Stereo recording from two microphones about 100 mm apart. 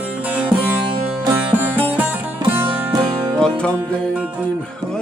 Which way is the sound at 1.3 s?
20° right (ahead or behind).